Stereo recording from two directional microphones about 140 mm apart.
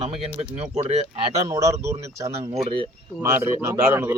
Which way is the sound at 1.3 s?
20° right (ahead or behind).